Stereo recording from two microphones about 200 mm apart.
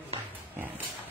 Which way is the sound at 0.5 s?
10° right (ahead or behind).